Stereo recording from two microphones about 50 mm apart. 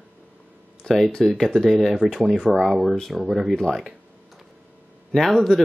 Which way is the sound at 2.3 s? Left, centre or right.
Centre.